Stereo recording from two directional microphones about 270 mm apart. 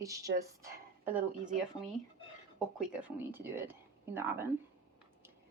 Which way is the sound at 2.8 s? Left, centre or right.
Centre.